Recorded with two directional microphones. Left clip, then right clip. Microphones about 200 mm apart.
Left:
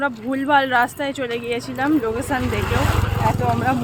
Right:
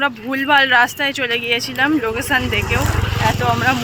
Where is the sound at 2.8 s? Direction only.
40° right (ahead or behind).